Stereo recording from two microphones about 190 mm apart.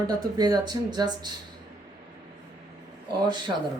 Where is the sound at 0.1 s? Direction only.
20° right (ahead or behind).